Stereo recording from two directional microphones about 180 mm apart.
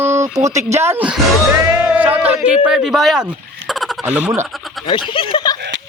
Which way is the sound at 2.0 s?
10° right (ahead or behind).